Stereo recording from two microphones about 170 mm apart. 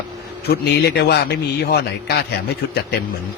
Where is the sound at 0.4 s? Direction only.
70° left (ahead or behind).